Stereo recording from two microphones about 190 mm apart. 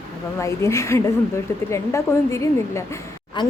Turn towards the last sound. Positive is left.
turn(degrees=15)  # may be behind; listen again after turning